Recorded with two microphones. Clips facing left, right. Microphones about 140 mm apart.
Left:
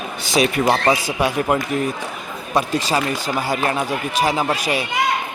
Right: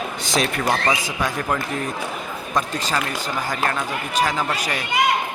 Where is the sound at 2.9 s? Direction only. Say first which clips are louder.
Left 3 dB; 10° left (ahead or behind).